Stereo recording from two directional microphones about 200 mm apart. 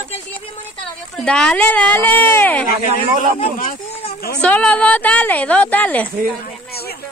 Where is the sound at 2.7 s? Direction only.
45° left (ahead or behind).